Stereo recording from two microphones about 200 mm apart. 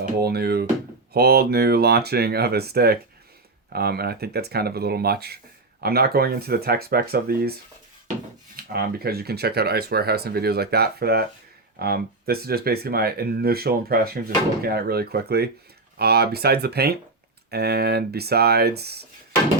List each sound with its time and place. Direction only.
0.0 s speech: 50° right (ahead or behind)
8.5 s speech: 50° right (ahead or behind)